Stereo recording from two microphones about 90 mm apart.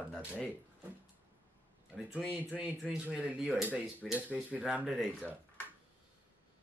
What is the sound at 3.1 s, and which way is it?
Speech, 15° right (ahead or behind).